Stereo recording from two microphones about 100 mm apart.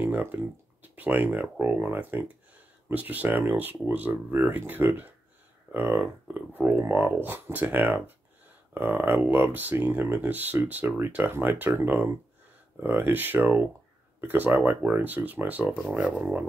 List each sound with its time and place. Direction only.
0.0 s speech: 20° right (ahead or behind)